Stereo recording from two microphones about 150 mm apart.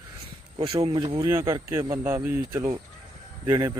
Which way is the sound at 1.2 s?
20° right (ahead or behind).